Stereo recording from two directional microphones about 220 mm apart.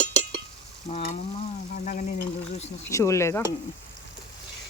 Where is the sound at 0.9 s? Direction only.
30° left (ahead or behind).